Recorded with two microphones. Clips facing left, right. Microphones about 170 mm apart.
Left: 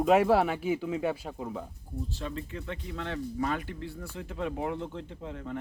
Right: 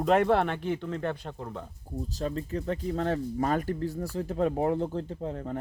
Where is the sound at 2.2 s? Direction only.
40° right (ahead or behind).